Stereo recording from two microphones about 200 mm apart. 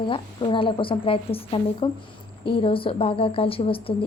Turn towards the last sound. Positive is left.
turn(degrees=25)  # may be behind; listen again after turning